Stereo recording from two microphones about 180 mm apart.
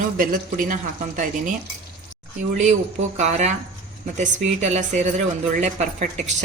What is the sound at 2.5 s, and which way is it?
A woman's voice, 40° right (ahead or behind).